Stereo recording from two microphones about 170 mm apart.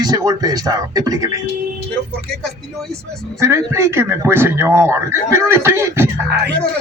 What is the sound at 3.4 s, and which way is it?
Speech, 15° right (ahead or behind).